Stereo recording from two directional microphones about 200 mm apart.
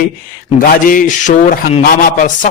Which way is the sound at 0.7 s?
45° left (ahead or behind).